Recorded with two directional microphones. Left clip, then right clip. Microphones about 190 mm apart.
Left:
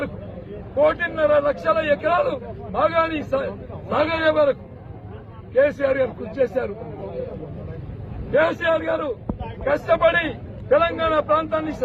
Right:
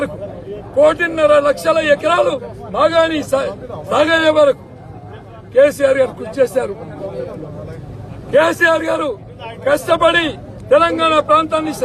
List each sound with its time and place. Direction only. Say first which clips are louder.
0.8 s a man's voice: right 7 dB; 30° right (ahead or behind)
5.5 s a man's voice: right 7 dB; 30° right (ahead or behind)
8.4 s a man's voice: right 7 dB; 30° right (ahead or behind)